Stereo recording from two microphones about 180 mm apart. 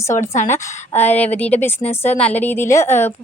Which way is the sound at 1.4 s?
10° left (ahead or behind).